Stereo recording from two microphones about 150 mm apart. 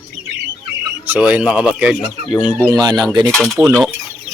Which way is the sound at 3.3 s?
5° left (ahead or behind).